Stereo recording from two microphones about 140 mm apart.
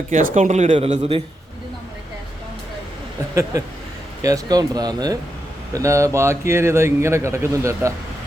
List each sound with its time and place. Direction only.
0.1 s speech: 65° right (ahead or behind)
4.2 s a man's voice: 25° right (ahead or behind)